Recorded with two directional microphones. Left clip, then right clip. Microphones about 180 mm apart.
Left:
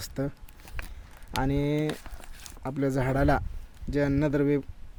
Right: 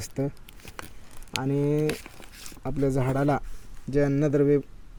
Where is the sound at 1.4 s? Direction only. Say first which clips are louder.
Right 2 dB; 20° left (ahead or behind).